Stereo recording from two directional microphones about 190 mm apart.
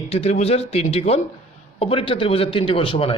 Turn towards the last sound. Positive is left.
turn(degrees=30)  # may be behind; listen again after turning